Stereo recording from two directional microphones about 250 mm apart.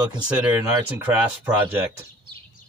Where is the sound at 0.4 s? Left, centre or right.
Centre.